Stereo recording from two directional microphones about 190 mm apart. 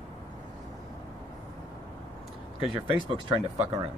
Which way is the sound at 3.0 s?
30° right (ahead or behind).